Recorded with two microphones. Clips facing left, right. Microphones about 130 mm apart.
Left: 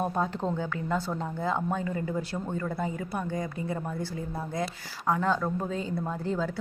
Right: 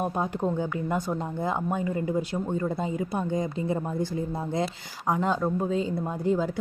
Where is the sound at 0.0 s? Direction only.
15° right (ahead or behind).